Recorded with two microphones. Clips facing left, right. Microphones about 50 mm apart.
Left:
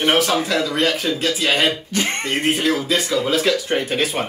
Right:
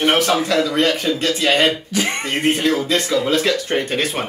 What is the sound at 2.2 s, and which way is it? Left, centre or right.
Speech, centre.